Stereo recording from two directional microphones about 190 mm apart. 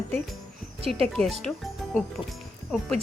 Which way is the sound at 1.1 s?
Centre (ahead or behind).